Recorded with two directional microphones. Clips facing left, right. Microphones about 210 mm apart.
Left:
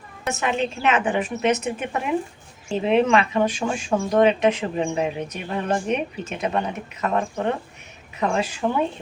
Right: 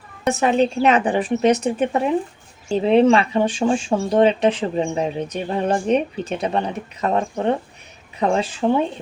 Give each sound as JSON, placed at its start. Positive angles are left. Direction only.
{"t": 0.3, "sound": "speech", "side_deg": -35}